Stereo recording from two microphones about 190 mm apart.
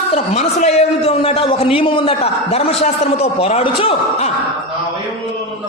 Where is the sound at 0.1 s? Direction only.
35° left (ahead or behind).